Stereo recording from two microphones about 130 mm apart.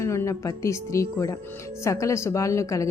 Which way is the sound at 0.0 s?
20° left (ahead or behind).